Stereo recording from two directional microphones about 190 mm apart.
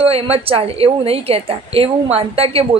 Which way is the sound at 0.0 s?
30° right (ahead or behind).